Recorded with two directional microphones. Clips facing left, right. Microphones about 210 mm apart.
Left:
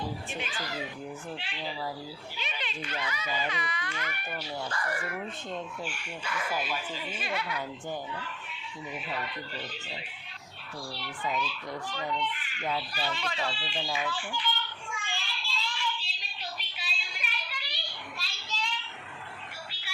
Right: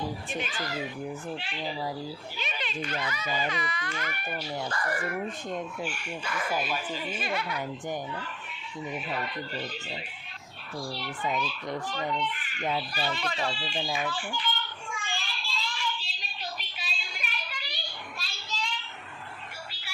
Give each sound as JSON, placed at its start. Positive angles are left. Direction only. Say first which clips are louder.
{"t": 1.4, "sound": "a child's voice", "louder": "right 3 dB", "side_deg": -45}
{"t": 5.5, "sound": "speech", "louder": "right 3 dB", "side_deg": -15}
{"t": 5.9, "sound": "a child's voice", "louder": "right 2 dB", "side_deg": -45}
{"t": 9.0, "sound": "a child's voice", "louder": "right 3 dB", "side_deg": -45}
{"t": 13.9, "sound": "children playing", "louder": "right 1 dB", "side_deg": -45}